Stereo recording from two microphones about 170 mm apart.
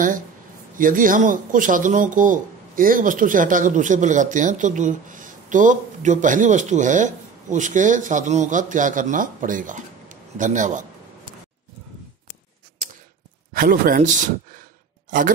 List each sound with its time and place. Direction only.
0.7 s speech: 55° right (ahead or behind)
13.5 s a man's voice: 55° right (ahead or behind)